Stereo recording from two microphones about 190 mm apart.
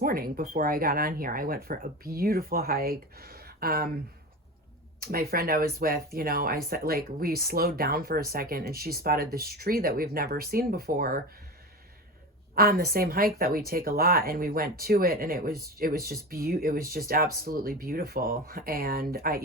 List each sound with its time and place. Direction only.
0.0 s speech: 50° right (ahead or behind)
4.9 s speech: 55° right (ahead or behind)
12.5 s speech: 55° right (ahead or behind)